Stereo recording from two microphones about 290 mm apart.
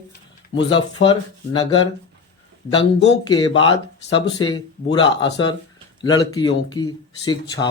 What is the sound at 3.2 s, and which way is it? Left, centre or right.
Speech, centre.